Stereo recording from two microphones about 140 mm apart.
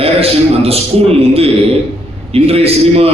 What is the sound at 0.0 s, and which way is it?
A man's voice, 45° right (ahead or behind).